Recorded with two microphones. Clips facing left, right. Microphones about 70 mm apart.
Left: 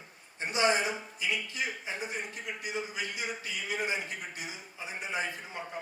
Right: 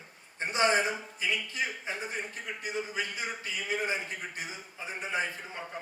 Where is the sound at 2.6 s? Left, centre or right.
Right.